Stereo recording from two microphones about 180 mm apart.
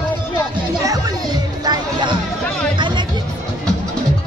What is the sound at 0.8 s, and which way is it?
Music, 20° right (ahead or behind).